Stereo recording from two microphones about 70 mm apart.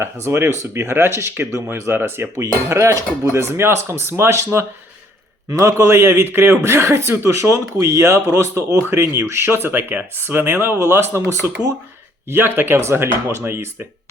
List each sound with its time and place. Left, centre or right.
0.0 s a man's voice: right